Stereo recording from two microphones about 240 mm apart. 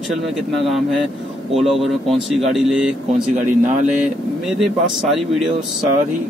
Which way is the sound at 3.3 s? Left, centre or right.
Right.